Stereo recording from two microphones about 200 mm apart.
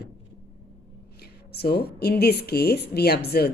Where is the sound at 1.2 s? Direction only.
50° left (ahead or behind).